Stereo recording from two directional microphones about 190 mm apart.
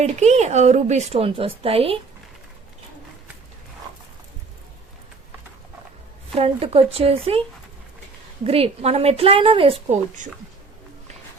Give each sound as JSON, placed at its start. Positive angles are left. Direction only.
{"t": 0.0, "sound": "a woman's voice", "side_deg": -35}
{"t": 6.3, "sound": "a woman's voice", "side_deg": -30}
{"t": 8.4, "sound": "a woman's voice", "side_deg": -30}